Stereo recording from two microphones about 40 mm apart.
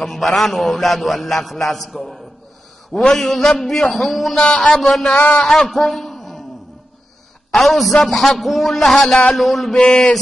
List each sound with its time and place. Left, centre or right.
0.0 s a man's voice: centre
3.2 s a man's voice: centre
4.4 s speech: left
4.8 s speech: centre
5.1 s a man's voice: left
5.5 s a sound: centre
7.5 s a man's voice: centre
9.8 s speech: left